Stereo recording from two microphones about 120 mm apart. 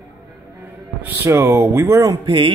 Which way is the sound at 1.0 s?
25° right (ahead or behind).